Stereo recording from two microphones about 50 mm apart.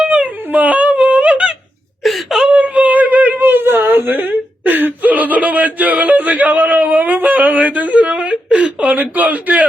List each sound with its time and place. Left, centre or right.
0.0 s whimper: right
0.5 s wail: right
2.0 s wail: centre
2.5 s whimper: right